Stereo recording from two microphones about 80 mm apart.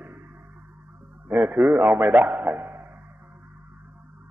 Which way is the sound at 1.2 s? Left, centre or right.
Right.